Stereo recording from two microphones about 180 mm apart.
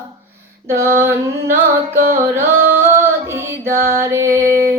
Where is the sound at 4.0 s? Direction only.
15° right (ahead or behind).